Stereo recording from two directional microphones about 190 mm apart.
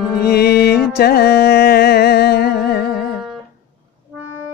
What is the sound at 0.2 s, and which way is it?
Music, 55° left (ahead or behind).